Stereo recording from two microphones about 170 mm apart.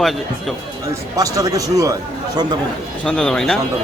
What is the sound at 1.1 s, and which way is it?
Speech, 20° right (ahead or behind).